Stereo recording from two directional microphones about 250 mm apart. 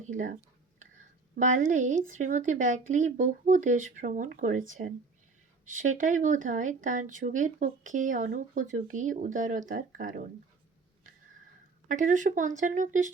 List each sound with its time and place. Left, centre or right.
0.8 s speech: right
6.0 s speech: right
11.9 s speech: right